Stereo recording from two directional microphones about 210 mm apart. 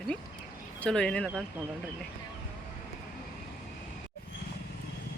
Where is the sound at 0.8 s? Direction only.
5° left (ahead or behind).